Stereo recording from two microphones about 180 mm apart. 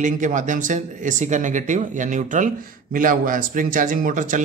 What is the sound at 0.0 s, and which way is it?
Speech, 45° right (ahead or behind).